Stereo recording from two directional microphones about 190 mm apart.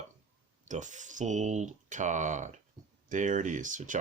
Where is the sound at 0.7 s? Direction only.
40° right (ahead or behind).